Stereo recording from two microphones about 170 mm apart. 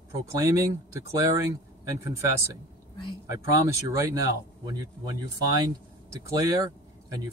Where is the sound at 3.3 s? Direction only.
20° right (ahead or behind).